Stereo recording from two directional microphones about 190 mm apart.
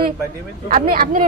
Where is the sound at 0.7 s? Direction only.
45° right (ahead or behind).